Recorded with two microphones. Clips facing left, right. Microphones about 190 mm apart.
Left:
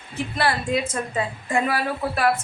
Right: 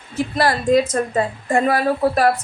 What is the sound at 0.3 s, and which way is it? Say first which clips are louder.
A woman's voice: right 7 dB; 40° right (ahead or behind).